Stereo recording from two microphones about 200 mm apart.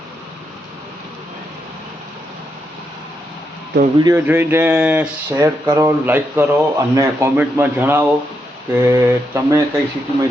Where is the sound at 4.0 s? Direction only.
20° right (ahead or behind).